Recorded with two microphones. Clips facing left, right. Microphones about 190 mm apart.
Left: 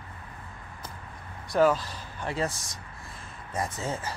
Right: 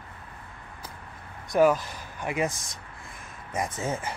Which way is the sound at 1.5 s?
15° right (ahead or behind).